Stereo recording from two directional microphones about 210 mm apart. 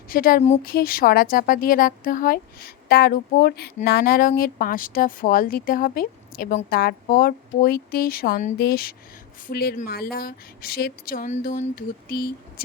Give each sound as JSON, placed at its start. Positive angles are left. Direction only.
{"t": 0.1, "sound": "speech", "side_deg": 45}